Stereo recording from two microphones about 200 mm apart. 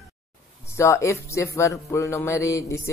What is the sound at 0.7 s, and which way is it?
Speech, 15° left (ahead or behind).